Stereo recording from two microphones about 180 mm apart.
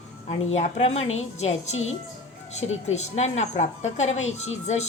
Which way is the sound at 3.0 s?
40° left (ahead or behind).